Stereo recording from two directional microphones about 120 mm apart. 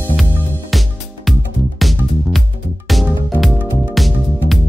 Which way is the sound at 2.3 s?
Centre (ahead or behind).